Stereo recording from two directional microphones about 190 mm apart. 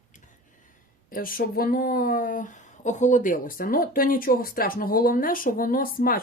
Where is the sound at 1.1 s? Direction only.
50° left (ahead or behind).